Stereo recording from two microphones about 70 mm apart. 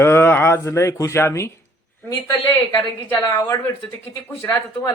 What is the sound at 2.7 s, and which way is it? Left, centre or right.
Speech, left.